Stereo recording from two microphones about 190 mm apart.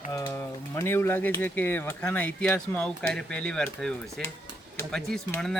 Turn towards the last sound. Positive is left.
turn(degrees=5)  # may be behind; listen again after turning